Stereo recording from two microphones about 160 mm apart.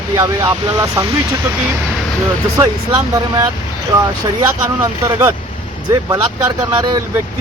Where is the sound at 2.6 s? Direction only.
20° right (ahead or behind).